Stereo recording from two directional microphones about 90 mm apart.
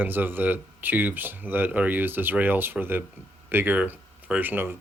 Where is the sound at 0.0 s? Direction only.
20° right (ahead or behind).